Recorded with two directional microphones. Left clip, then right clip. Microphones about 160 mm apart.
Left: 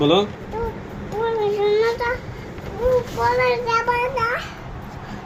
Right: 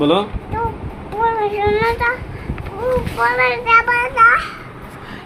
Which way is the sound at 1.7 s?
25° left (ahead or behind).